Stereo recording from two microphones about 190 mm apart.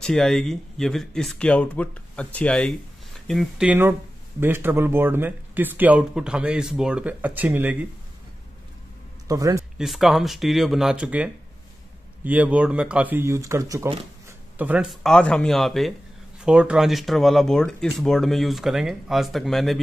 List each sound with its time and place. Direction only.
0.0 s speech: 5° left (ahead or behind)
9.3 s a man's voice: 15° right (ahead or behind)
9.8 s speech: centre (ahead or behind)